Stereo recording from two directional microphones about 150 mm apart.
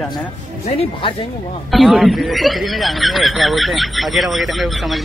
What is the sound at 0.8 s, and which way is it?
Speech, 35° left (ahead or behind).